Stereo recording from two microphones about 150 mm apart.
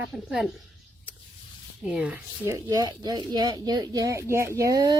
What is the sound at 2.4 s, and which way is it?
Speech, 20° right (ahead or behind).